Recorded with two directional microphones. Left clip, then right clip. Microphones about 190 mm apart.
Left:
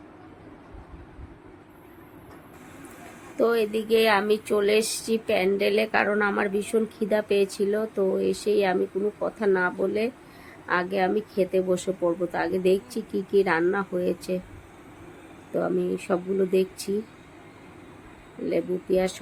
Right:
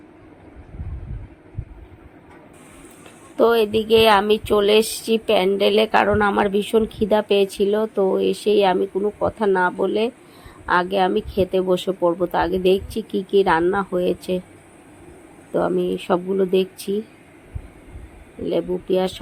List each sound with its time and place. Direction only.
3.3 s speech: 20° right (ahead or behind)
15.5 s speech: 15° right (ahead or behind)
18.4 s speech: 10° right (ahead or behind)